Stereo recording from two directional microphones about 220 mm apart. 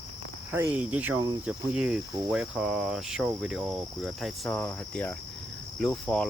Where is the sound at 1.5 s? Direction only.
5° right (ahead or behind).